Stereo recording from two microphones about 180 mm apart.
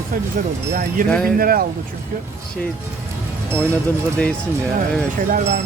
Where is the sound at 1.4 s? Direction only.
55° right (ahead or behind).